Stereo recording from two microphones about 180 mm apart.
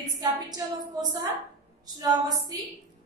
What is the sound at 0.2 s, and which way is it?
A woman's voice, 20° right (ahead or behind).